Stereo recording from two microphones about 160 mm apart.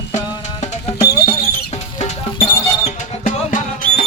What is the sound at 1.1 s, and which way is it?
Music, 75° left (ahead or behind).